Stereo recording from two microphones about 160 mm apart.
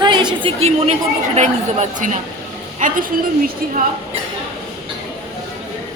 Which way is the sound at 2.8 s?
55° right (ahead or behind).